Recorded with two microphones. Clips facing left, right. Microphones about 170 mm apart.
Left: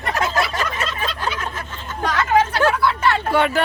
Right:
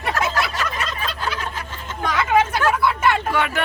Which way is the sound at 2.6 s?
30° left (ahead or behind).